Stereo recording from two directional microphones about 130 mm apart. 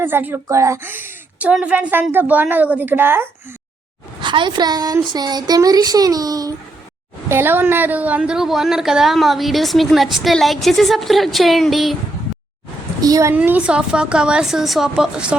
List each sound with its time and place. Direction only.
0.0 s a woman's voice: 15° right (ahead or behind)
4.2 s speech: 35° right (ahead or behind)
7.3 s a woman's voice: 15° right (ahead or behind); by 11.9 s centre (ahead or behind)
13.0 s a woman's voice: 25° right (ahead or behind)
13.3 s a woman's voice: 15° right (ahead or behind)